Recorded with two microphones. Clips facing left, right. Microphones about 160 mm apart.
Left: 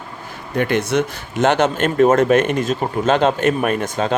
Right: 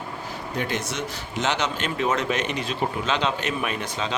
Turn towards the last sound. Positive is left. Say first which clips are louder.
# left 9 dB
turn(degrees=50)  # may be behind; listen again after turning